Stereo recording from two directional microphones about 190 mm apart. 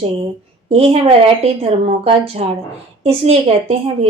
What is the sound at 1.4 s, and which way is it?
A woman's voice, 30° right (ahead or behind).